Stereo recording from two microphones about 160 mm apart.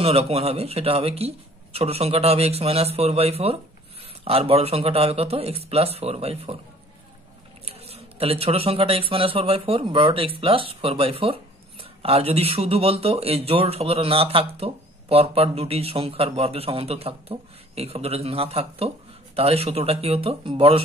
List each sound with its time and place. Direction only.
0.0 s speech: 40° right (ahead or behind)
7.6 s speech: 40° right (ahead or behind)